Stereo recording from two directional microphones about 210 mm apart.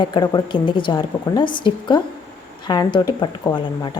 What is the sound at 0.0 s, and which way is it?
A woman's voice, 20° left (ahead or behind).